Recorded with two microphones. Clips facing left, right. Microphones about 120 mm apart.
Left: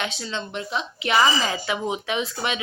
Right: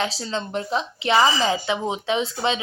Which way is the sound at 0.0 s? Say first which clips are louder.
Right 4 dB; 35° right (ahead or behind).